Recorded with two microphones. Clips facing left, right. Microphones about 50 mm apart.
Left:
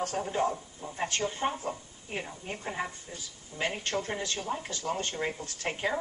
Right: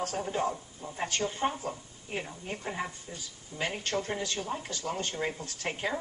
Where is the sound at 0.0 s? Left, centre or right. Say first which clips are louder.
Left 1 dB; centre.